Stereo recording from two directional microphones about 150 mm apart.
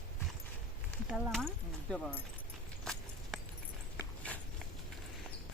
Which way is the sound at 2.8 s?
Centre (ahead or behind).